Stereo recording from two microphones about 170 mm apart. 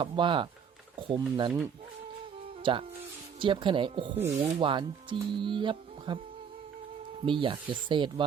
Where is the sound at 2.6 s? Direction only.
30° right (ahead or behind).